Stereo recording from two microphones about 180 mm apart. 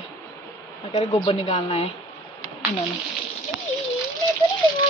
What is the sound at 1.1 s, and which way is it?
Speech, 35° left (ahead or behind).